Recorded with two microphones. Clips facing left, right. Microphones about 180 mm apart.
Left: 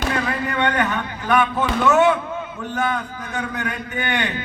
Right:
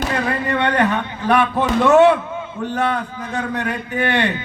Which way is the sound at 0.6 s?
35° right (ahead or behind).